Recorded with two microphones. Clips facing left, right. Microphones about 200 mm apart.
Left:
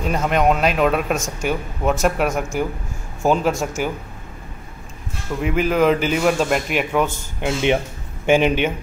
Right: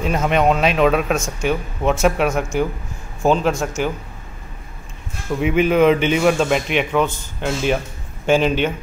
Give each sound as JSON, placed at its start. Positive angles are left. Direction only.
{"t": 0.0, "sound": "speech", "side_deg": 0}
{"t": 5.4, "sound": "speech", "side_deg": 0}
{"t": 7.3, "sound": "speech", "side_deg": 15}